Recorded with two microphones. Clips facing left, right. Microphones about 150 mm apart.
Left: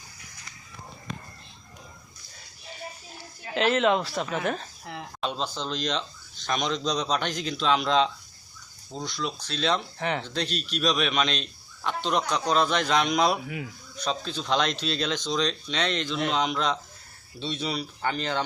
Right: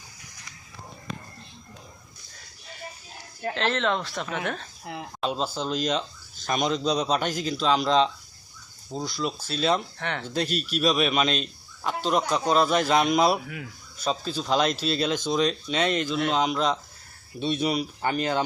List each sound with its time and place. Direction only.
3.5 s a man's voice: 10° left (ahead or behind); by 9.8 s 5° right (ahead or behind)
10.0 s a man's voice: 5° left (ahead or behind)
10.2 s a man's voice: 10° right (ahead or behind)
17.4 s speech: 10° right (ahead or behind)